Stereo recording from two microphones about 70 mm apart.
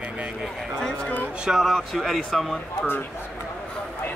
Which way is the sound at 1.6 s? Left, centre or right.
Centre.